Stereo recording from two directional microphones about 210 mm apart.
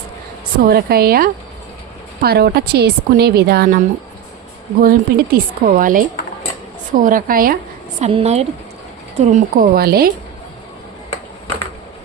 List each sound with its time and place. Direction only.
0.6 s a woman's voice: 45° right (ahead or behind)
8.0 s a woman's voice: 30° right (ahead or behind); by 10.1 s 45° right (ahead or behind)